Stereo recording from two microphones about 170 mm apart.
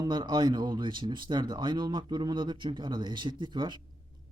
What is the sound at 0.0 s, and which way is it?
Speech, 25° right (ahead or behind).